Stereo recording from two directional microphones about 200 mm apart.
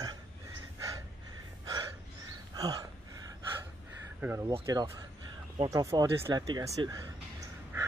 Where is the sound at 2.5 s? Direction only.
20° right (ahead or behind).